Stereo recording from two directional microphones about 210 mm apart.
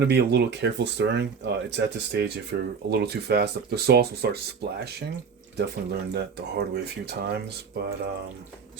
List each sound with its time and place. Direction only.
0.0 s speech: 50° right (ahead or behind)